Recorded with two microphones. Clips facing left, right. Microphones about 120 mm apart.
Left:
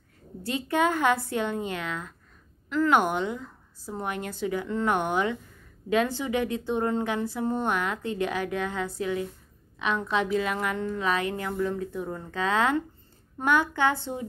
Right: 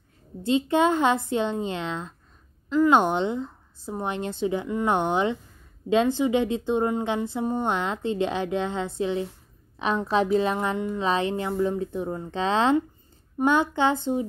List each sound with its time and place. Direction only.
0.4 s speech: 20° right (ahead or behind)
10.8 s speech: 15° right (ahead or behind)
11.1 s speech: 25° right (ahead or behind)